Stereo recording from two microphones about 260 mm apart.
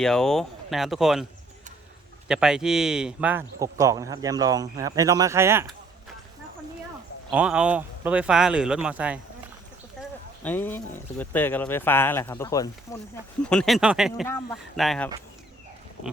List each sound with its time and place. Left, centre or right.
0.0 s speech: centre
7.3 s speech: centre
10.4 s speech: centre